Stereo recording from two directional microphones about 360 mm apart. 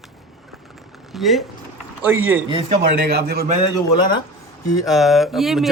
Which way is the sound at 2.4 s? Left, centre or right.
Centre.